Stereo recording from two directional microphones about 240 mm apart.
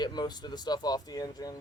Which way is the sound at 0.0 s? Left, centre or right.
Centre.